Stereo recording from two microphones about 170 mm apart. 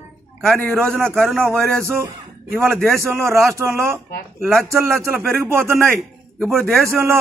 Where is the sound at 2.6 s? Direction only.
5° left (ahead or behind).